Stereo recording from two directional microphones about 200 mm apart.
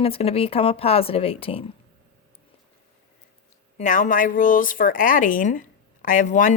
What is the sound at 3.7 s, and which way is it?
Speech, 40° left (ahead or behind).